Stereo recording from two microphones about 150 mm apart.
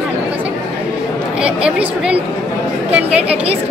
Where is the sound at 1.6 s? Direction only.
5° right (ahead or behind).